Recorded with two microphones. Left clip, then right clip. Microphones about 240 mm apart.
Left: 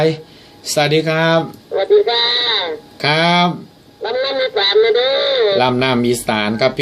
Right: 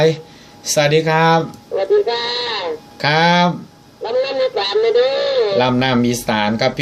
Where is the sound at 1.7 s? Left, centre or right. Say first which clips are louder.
Left 3 dB; right.